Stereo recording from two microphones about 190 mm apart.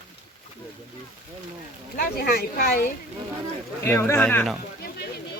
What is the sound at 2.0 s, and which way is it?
Speech, 55° left (ahead or behind).